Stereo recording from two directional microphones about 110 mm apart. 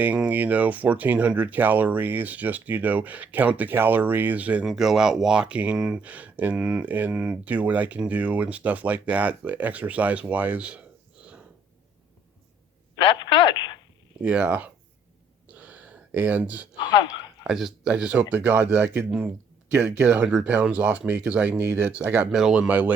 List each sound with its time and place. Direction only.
0.0 s speech: 15° right (ahead or behind)
4.6 s speech: 5° right (ahead or behind)
13.0 s radio: 45° left (ahead or behind)
14.2 s speech: 10° right (ahead or behind)
15.5 s a sound: 15° right (ahead or behind)
17.4 s speech: 5° right (ahead or behind)
22.3 s speech: 5° right (ahead or behind)